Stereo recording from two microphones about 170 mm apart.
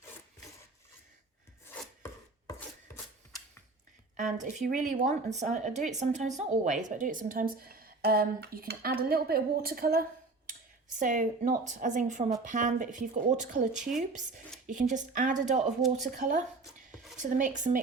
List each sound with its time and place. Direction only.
4.4 s speech: 45° right (ahead or behind)
11.0 s speech: 50° right (ahead or behind)